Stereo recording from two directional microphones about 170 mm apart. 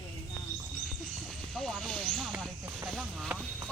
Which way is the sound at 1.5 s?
Centre (ahead or behind).